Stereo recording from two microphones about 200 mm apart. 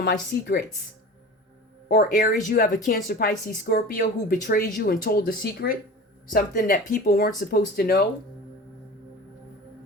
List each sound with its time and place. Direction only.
0.0 s speech: 60° left (ahead or behind)
1.9 s speech: 45° left (ahead or behind)